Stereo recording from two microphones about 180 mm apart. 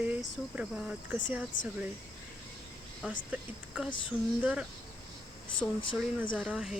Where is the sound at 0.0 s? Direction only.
10° right (ahead or behind).